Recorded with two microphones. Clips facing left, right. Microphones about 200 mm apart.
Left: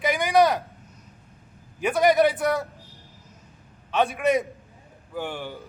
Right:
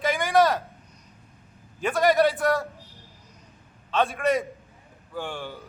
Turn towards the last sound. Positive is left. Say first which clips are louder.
# left 2 dB
turn(degrees=15)  # may be behind; listen again after turning